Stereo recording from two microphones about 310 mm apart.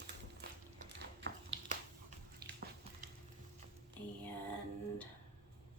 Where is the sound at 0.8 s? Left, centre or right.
Right.